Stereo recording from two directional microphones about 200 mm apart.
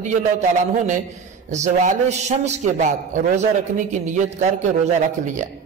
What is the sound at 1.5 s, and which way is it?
A man's voice, 35° right (ahead or behind).